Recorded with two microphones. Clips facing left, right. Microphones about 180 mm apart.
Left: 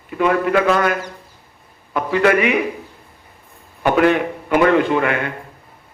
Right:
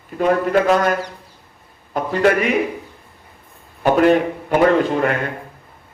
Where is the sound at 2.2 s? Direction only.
45° right (ahead or behind).